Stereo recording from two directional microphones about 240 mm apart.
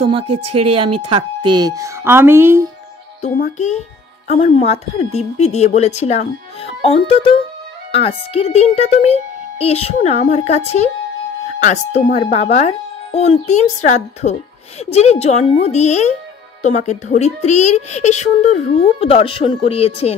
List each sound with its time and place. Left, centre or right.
0.0 s speech: right
0.3 s speech: right
0.6 s speech: right
3.2 s speech: left